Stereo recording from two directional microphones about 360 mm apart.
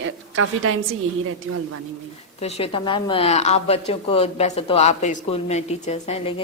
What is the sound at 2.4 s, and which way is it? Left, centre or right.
A woman's voice, centre.